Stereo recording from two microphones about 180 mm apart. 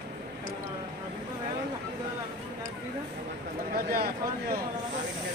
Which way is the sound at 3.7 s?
55° right (ahead or behind).